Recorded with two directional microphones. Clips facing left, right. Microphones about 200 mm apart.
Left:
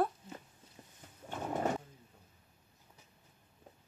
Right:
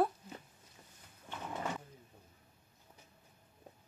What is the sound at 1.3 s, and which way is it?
Pigeon, 45° left (ahead or behind).